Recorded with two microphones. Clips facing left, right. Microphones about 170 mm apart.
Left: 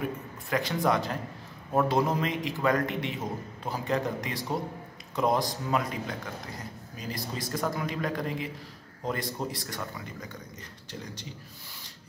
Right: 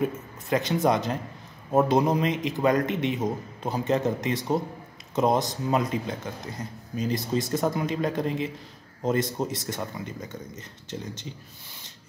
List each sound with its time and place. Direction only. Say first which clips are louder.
0.5 s a man's voice: right 4 dB; 20° right (ahead or behind)